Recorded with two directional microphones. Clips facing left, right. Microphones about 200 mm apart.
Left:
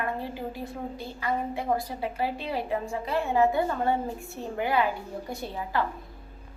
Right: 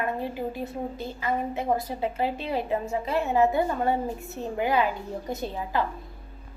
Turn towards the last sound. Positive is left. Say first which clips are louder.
# right 2 dB
turn(degrees=-20)  # may be behind; listen again after turning